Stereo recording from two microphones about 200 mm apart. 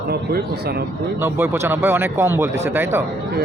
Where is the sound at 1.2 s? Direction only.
10° right (ahead or behind).